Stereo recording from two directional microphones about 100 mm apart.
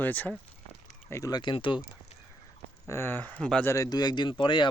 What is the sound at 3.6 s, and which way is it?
Speech, 30° left (ahead or behind).